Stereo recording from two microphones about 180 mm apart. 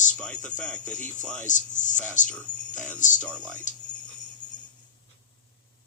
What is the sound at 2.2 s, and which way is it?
Speech, 5° left (ahead or behind).